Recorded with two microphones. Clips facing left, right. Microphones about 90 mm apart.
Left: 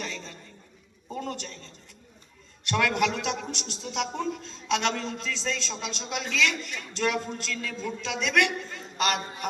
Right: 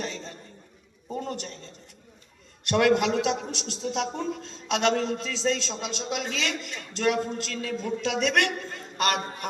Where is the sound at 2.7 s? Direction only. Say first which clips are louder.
Right 4 dB; 30° right (ahead or behind).